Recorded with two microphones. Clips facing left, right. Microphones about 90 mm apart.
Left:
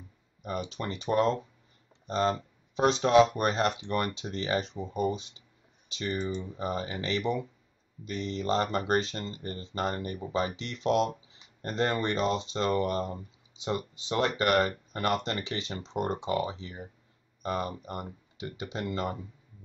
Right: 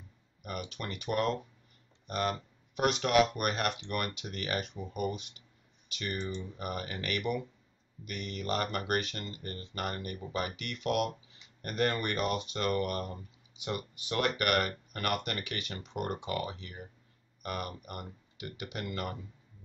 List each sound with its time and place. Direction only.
0.4 s speech: 25° left (ahead or behind)